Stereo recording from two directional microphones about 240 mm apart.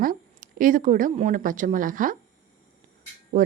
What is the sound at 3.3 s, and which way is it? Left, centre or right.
Speech, right.